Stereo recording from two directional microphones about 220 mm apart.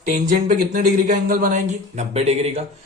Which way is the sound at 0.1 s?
35° right (ahead or behind).